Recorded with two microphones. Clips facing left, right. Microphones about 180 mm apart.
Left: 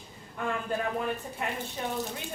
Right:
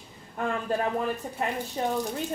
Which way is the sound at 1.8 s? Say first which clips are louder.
Right 7 dB; 35° right (ahead or behind).